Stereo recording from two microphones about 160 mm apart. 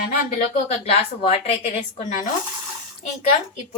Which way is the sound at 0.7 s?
40° left (ahead or behind).